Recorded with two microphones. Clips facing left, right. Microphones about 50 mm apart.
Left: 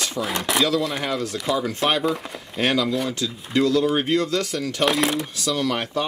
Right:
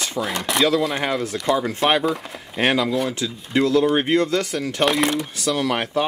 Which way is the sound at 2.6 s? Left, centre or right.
Centre.